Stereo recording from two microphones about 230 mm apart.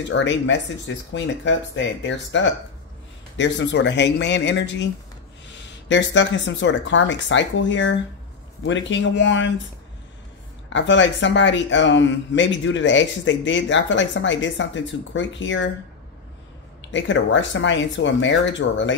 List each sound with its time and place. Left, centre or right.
0.1 s speech: left
10.7 s speech: left
16.9 s speech: left